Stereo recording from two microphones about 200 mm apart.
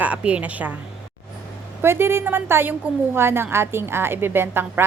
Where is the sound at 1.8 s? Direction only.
10° right (ahead or behind).